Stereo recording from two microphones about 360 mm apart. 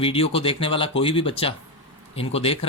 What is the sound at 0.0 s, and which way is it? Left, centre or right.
Speech, centre.